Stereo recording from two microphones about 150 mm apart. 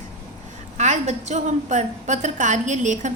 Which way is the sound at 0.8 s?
50° right (ahead or behind).